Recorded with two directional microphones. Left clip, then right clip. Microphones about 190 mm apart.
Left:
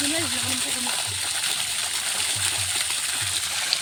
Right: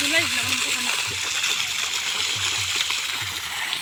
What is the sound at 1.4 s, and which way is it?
Water, 40° left (ahead or behind).